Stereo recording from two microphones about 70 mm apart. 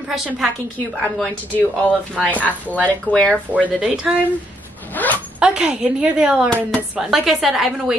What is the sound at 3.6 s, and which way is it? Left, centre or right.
Speech, centre.